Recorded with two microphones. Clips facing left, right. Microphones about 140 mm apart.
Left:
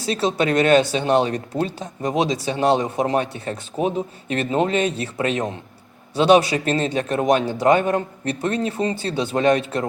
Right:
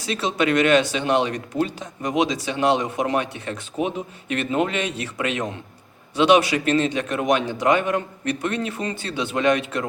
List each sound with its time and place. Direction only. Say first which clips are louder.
0.0 s speech: left 2 dB; 35° left (ahead or behind)